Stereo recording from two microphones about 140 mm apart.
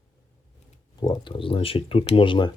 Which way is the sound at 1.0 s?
30° left (ahead or behind).